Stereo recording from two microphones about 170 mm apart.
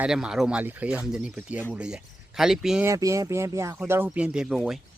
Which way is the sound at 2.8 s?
20° right (ahead or behind).